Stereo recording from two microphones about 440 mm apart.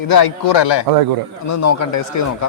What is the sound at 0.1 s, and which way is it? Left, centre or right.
Speech, left.